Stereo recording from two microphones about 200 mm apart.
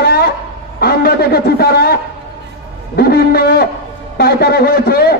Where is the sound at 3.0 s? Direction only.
50° left (ahead or behind).